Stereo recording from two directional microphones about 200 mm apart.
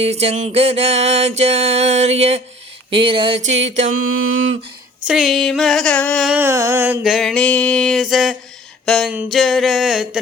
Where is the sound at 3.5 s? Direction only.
70° right (ahead or behind).